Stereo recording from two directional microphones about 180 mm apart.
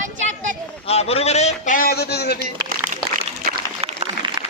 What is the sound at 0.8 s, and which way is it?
A man's voice, 35° left (ahead or behind).